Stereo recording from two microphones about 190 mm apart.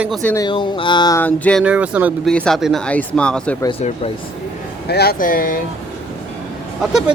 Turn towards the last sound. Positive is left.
turn(degrees=0)  # may be behind; listen again after turning